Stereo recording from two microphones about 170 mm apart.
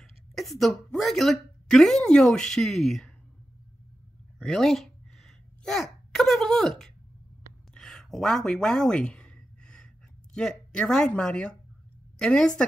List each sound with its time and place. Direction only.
0.0 s a woman's voice: centre (ahead or behind)
4.4 s a sound: centre (ahead or behind)
10.3 s speech: 5° left (ahead or behind)